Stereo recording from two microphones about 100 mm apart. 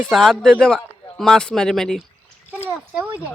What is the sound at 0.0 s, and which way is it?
Speech, centre (ahead or behind).